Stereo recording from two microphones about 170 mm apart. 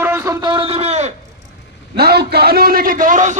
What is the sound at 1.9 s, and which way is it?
A man's voice, 70° right (ahead or behind).